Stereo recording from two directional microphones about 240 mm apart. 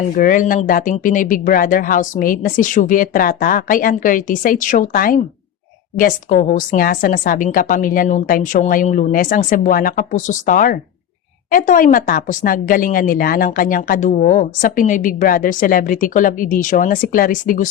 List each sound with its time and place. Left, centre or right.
0.1 s speech: left